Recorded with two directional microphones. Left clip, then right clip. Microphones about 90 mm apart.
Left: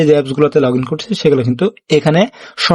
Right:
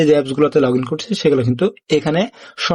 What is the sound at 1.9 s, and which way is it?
Speech, 35° left (ahead or behind).